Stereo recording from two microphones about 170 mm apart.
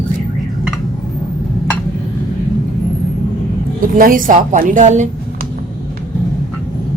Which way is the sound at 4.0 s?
55° right (ahead or behind).